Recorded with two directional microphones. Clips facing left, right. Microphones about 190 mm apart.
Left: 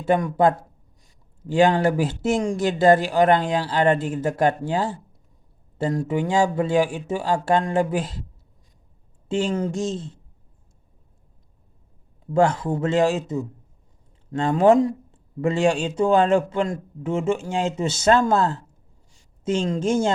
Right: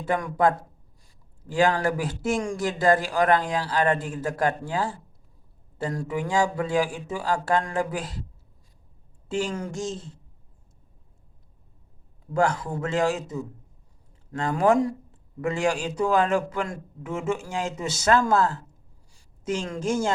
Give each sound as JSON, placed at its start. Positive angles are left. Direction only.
{"t": 0.0, "sound": "speech", "side_deg": 25}
{"t": 9.3, "sound": "speech", "side_deg": 25}
{"t": 12.2, "sound": "speech", "side_deg": 25}